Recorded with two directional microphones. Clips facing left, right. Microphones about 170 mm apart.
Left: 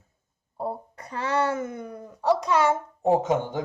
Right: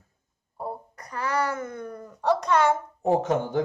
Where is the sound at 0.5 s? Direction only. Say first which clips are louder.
Left 3 dB; 25° left (ahead or behind).